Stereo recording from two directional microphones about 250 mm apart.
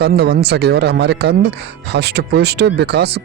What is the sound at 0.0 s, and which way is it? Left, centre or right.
A man's voice, right.